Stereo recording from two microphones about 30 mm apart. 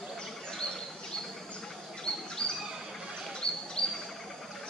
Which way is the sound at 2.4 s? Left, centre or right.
Left.